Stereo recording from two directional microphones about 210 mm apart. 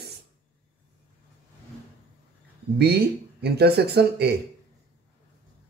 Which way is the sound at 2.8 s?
50° right (ahead or behind).